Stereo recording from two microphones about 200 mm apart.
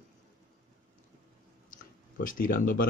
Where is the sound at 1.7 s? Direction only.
45° left (ahead or behind).